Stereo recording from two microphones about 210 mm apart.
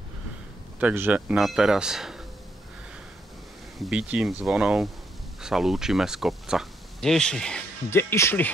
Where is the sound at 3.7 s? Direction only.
5° right (ahead or behind).